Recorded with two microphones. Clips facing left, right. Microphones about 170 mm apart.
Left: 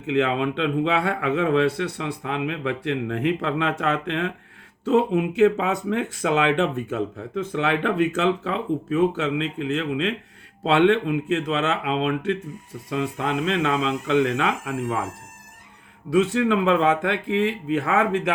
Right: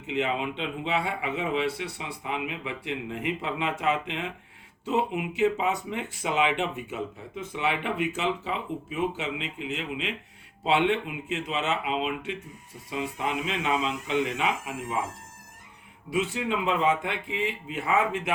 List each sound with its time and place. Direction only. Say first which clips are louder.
0.1 s a man's voice: left 7 dB; 90° left
5.4 s a man's voice: left 5 dB; 90° left
9.4 s speech: left 9 dB; 10° right (ahead or behind)
9.7 s a man's voice: left 9 dB; 90° left
16.1 s a man's voice: left 8 dB; 90° left
17.4 s a man's voice: left 8 dB; 90° left